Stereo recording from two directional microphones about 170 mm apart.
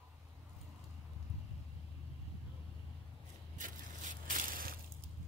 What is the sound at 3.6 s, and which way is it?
Crushing, 50° right (ahead or behind).